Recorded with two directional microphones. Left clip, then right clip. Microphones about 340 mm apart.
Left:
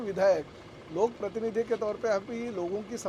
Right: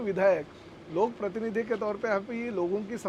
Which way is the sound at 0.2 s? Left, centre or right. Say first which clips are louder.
Even; right.